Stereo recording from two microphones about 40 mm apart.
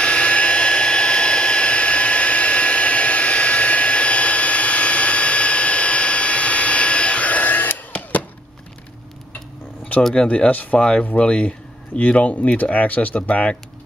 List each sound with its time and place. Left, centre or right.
0.0 s hair dryer: left
7.9 s a sound: left
10.1 s speech: left
10.8 s speech: left